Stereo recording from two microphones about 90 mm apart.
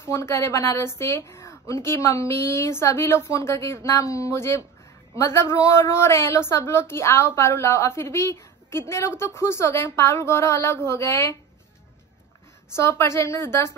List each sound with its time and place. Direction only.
0.1 s a woman's voice: 35° left (ahead or behind)
12.7 s a woman's voice: 30° left (ahead or behind)